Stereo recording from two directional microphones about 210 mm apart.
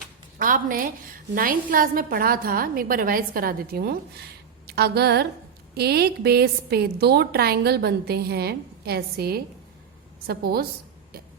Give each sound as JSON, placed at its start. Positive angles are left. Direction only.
{"t": 0.3, "sound": "a woman's voice", "side_deg": -40}